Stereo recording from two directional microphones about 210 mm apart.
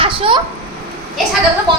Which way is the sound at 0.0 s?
25° right (ahead or behind).